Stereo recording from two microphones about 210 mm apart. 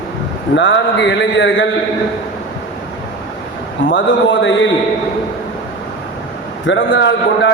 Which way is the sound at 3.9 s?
60° left (ahead or behind).